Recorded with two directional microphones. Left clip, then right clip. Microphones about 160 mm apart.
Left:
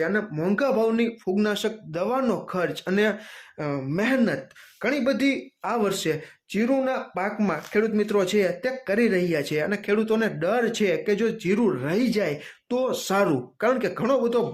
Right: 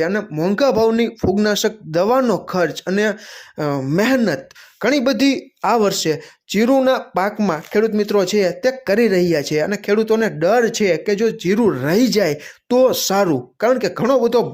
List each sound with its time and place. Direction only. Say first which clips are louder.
0.0 s speech: right 6 dB; 40° right (ahead or behind)
3.6 s speech: right 8 dB; 55° right (ahead or behind)
5.9 s speech: right 6 dB; 40° right (ahead or behind)
6.6 s speech: right 9 dB; 55° right (ahead or behind)
7.3 s speech: right 6 dB; 40° right (ahead or behind)
13.1 s speech: right 6 dB; 35° right (ahead or behind)